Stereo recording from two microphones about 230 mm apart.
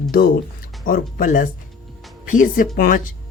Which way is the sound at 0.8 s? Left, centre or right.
Left.